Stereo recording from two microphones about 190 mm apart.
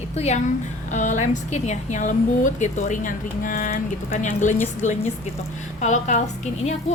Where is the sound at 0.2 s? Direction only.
40° left (ahead or behind).